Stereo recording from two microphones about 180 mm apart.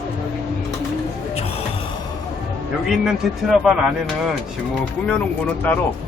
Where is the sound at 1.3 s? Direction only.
35° left (ahead or behind).